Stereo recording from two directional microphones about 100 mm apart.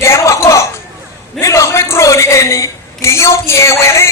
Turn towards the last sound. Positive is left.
turn(degrees=30)  # may be behind; listen again after turning